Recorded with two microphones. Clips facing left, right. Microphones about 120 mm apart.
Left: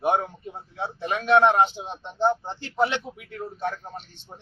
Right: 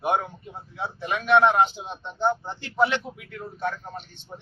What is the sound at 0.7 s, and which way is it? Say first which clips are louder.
Speech: left 1 dB; 35° left (ahead or behind).